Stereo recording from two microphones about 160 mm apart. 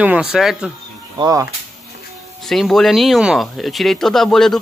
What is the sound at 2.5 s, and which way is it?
Speech, centre (ahead or behind).